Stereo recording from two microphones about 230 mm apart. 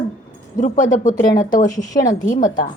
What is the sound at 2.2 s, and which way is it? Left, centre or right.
Speech, left.